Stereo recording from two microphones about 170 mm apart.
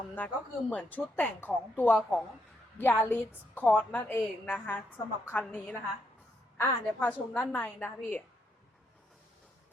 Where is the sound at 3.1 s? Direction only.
10° left (ahead or behind).